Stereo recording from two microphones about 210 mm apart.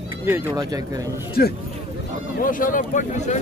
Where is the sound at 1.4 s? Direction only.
45° left (ahead or behind).